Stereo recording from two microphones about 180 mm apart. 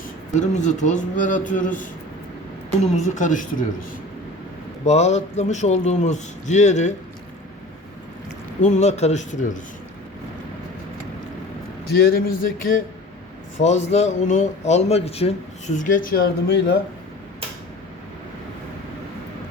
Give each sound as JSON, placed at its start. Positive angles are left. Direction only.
{"t": 0.3, "sound": "a man's voice", "side_deg": 40}
{"t": 4.9, "sound": "a man's voice", "side_deg": 40}
{"t": 8.6, "sound": "a man's voice", "side_deg": 40}
{"t": 12.0, "sound": "a sound", "side_deg": 55}
{"t": 13.6, "sound": "a man's voice", "side_deg": 40}